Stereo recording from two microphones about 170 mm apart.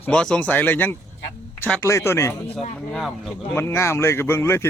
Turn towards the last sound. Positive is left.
turn(degrees=15)  # may be behind; listen again after turning